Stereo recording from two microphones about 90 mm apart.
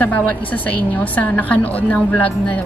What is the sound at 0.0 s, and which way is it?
A woman's voice, 20° left (ahead or behind).